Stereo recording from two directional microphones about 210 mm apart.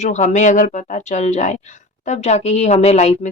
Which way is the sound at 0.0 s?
35° left (ahead or behind).